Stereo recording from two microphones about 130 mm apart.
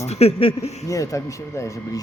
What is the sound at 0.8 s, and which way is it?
Speech, 25° left (ahead or behind).